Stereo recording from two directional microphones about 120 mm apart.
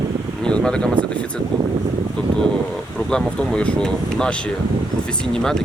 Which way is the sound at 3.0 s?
5° left (ahead or behind).